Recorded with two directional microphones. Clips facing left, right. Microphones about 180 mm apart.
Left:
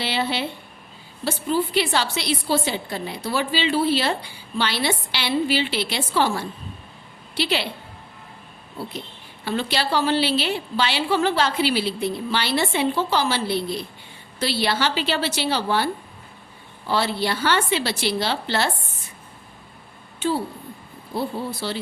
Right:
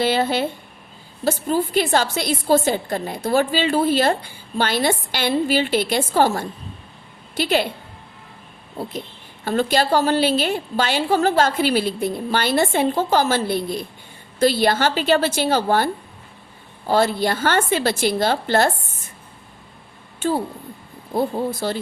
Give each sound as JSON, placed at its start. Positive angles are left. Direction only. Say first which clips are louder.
{"t": 0.0, "sound": "a woman's voice", "louder": "right 6 dB", "side_deg": -45}
{"t": 9.4, "sound": "a woman's voice", "louder": "right 5 dB", "side_deg": -45}
{"t": 20.1, "sound": "a woman's voice", "louder": "right 2 dB", "side_deg": -45}